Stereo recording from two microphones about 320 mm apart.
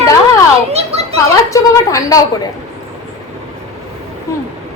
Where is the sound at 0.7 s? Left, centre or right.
Centre.